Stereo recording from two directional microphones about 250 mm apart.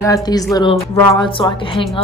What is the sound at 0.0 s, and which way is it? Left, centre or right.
Speech, centre.